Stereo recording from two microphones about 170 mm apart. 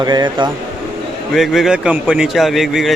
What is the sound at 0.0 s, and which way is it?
Speech, 25° right (ahead or behind).